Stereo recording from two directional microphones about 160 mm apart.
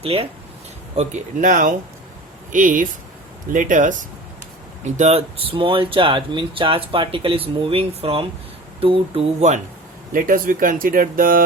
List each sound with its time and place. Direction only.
0.0 s speech: 35° right (ahead or behind)
0.9 s speech: 50° right (ahead or behind)
4.9 s speech: 40° right (ahead or behind)
10.1 s speech: 60° right (ahead or behind)